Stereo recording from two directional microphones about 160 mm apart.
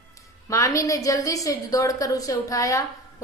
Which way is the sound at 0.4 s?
20° left (ahead or behind).